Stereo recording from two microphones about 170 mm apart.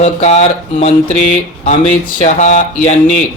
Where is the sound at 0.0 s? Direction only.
40° left (ahead or behind).